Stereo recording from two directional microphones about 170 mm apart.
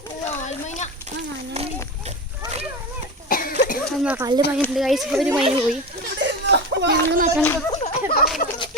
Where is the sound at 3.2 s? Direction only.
55° left (ahead or behind).